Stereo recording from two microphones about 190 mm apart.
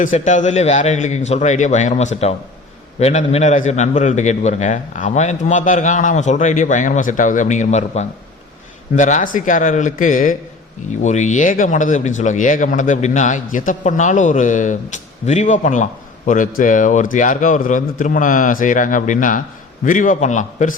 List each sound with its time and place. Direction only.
0.0 s a man's voice: 40° left (ahead or behind)